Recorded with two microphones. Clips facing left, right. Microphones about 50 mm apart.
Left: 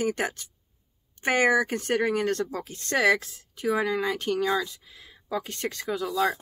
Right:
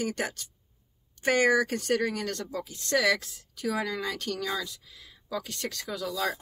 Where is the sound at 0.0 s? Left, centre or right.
Left.